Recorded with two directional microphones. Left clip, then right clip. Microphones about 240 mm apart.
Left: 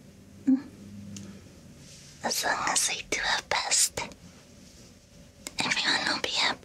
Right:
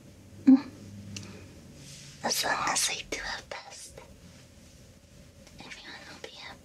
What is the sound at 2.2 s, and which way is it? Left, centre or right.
Speech, centre.